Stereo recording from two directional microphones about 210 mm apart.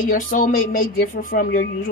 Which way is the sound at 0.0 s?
40° left (ahead or behind).